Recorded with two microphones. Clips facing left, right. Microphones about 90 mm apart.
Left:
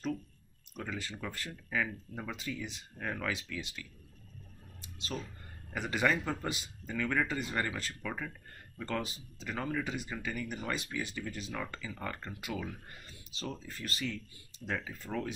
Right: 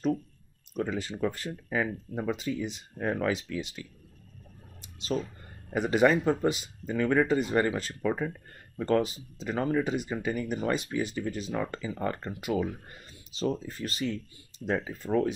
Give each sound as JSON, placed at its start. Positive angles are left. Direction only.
{"t": 0.7, "sound": "speech", "side_deg": -25}
{"t": 5.7, "sound": "speech", "side_deg": -25}